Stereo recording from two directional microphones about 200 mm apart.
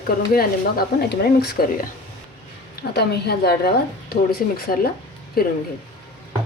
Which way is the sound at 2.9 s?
55° left (ahead or behind).